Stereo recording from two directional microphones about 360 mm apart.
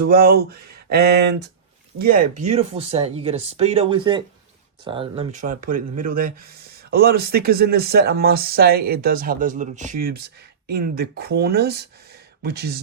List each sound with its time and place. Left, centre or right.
0.0 s speech: right